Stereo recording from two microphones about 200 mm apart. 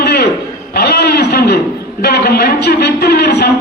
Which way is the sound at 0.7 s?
55° left (ahead or behind).